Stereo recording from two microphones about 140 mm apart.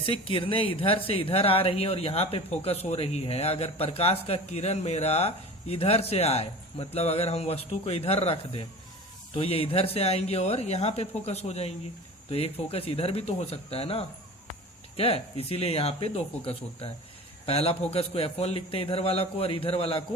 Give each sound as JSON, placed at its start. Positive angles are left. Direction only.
{"t": 0.0, "sound": "speech", "side_deg": 40}